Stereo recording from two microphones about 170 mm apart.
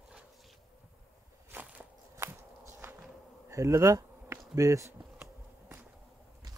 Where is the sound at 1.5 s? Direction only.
10° right (ahead or behind).